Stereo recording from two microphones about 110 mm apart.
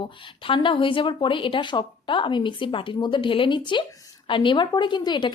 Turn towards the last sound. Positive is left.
turn(degrees=45)  # may be behind; listen again after turning